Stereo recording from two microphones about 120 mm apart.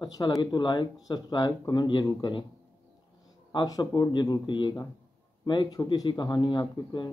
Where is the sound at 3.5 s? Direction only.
35° left (ahead or behind).